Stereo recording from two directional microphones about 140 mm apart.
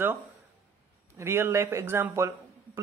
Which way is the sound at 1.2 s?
20° right (ahead or behind).